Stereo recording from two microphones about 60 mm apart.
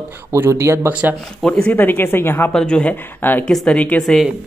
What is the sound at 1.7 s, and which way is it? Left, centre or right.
Speech, left.